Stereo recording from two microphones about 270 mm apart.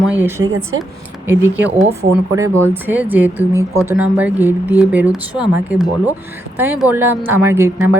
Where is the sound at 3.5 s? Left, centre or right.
Centre.